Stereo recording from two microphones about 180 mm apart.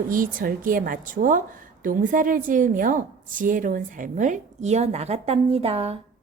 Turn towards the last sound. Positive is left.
turn(degrees=-35)  # may be behind; listen again after turning